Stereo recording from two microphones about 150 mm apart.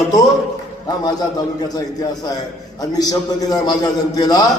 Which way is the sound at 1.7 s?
25° left (ahead or behind).